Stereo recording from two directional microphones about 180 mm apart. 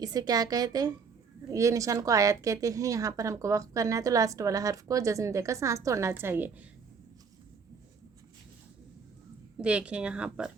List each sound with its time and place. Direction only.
0.0 s a woman's voice: 20° right (ahead or behind)
9.6 s a woman's voice: 5° right (ahead or behind)